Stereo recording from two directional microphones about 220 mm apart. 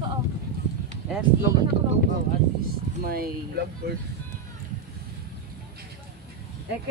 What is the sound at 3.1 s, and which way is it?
Speech, 45° right (ahead or behind).